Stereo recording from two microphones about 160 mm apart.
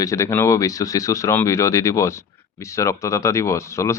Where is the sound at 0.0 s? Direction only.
20° left (ahead or behind).